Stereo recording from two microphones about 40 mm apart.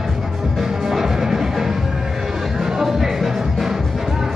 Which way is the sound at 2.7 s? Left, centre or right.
Centre.